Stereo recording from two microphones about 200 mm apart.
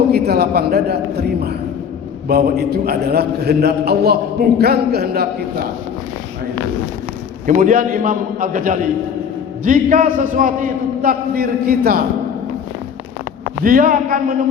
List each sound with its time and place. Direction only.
0.1 s a sound: 50° right (ahead or behind)
2.2 s a man's voice: 50° right (ahead or behind)
7.4 s a man's voice: 40° right (ahead or behind)
13.7 s a man's voice: 45° right (ahead or behind)